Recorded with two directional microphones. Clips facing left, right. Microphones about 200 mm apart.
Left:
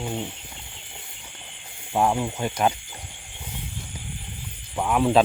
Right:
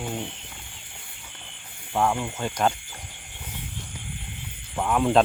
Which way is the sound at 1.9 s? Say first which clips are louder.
Left 2 dB; 20° left (ahead or behind).